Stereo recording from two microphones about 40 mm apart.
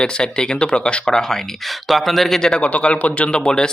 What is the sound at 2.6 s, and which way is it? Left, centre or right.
A man's voice, left.